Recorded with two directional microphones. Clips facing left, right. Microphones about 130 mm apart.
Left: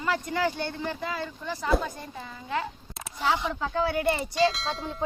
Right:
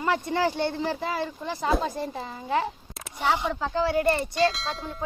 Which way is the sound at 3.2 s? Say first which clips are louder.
Right 2 dB; 10° right (ahead or behind).